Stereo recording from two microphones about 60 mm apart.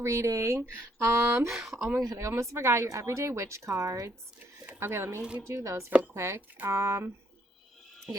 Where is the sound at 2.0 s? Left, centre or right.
Right.